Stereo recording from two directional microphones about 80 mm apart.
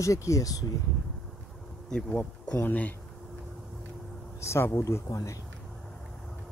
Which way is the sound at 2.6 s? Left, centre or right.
Left.